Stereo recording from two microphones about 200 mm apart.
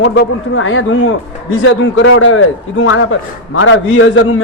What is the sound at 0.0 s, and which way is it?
A man's voice, 70° left (ahead or behind).